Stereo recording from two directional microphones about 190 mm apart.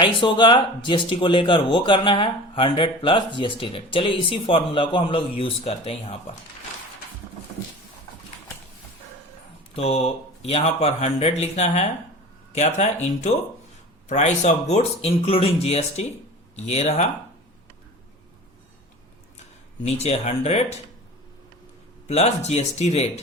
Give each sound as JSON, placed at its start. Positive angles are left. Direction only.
{"t": 0.0, "sound": "speech", "side_deg": 25}
{"t": 9.7, "sound": "speech", "side_deg": 30}
{"t": 19.8, "sound": "speech", "side_deg": 35}
{"t": 22.0, "sound": "speech", "side_deg": 35}